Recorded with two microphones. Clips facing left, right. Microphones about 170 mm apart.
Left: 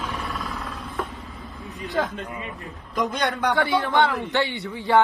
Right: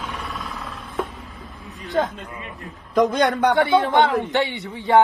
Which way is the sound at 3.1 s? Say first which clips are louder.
Right 6 dB; 55° right (ahead or behind).